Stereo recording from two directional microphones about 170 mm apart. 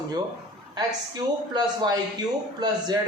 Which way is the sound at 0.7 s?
25° right (ahead or behind).